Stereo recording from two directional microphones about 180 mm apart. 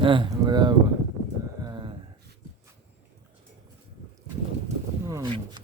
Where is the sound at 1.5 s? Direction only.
25° right (ahead or behind).